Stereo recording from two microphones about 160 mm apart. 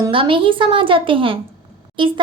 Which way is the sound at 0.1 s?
35° right (ahead or behind).